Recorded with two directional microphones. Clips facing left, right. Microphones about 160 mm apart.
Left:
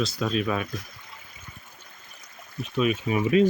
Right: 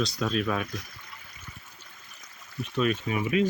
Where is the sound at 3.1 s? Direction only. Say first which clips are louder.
Left 8 dB; 35° left (ahead or behind).